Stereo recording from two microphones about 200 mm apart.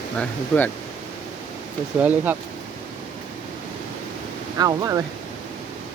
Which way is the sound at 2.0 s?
10° right (ahead or behind).